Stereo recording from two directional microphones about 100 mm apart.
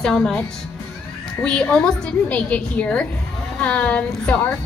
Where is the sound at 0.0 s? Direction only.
5° left (ahead or behind).